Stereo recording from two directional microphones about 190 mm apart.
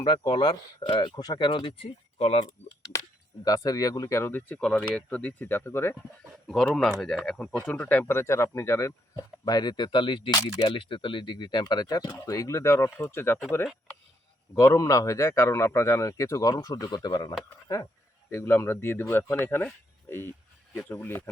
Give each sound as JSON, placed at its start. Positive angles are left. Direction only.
{"t": 0.0, "sound": "speech", "side_deg": 25}
{"t": 3.4, "sound": "speech", "side_deg": 20}
{"t": 14.5, "sound": "speech", "side_deg": 15}